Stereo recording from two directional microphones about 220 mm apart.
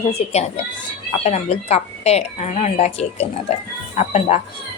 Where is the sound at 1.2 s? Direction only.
30° left (ahead or behind).